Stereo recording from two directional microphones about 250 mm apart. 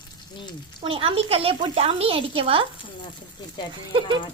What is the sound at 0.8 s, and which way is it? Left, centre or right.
Speech, right.